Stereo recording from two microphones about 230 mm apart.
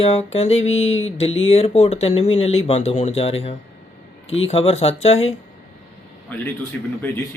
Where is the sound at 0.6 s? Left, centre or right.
Left.